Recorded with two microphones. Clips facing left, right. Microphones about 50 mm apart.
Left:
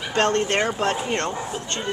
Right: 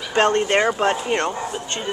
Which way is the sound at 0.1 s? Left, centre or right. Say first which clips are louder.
Right 3 dB; centre.